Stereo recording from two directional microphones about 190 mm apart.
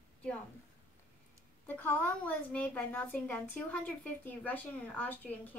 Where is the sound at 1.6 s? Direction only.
10° left (ahead or behind).